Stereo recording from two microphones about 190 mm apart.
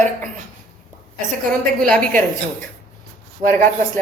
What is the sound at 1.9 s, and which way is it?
Speech, 5° left (ahead or behind).